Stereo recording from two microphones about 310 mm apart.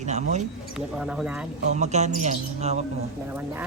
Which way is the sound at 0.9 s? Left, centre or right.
Centre.